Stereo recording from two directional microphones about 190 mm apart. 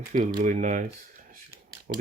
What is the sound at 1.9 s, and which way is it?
Speech, 45° right (ahead or behind).